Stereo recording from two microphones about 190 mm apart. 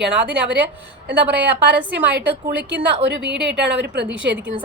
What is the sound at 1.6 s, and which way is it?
A woman's voice, 70° right (ahead or behind).